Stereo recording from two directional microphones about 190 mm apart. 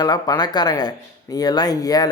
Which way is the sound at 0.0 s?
20° left (ahead or behind).